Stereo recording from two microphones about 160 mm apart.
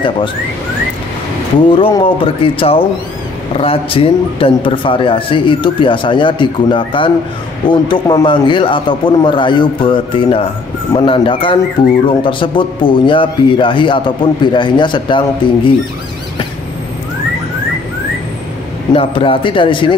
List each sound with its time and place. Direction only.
1.8 s a man's voice: 35° left (ahead or behind)
18.9 s a man's voice: 35° left (ahead or behind)